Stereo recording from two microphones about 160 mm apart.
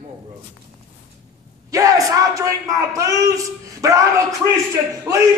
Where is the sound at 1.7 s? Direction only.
20° right (ahead or behind).